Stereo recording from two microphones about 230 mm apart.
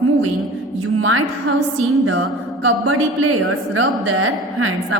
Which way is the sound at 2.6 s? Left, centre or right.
Right.